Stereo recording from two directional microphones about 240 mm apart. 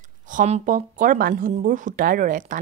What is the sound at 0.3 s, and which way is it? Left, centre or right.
Speech, right.